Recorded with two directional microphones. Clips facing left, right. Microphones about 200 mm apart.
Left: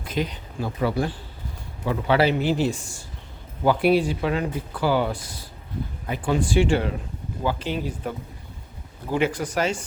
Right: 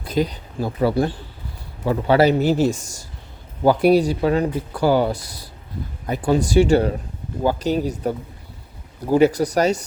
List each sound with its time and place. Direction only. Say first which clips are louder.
0.0 s speech: right 6 dB; 35° right (ahead or behind)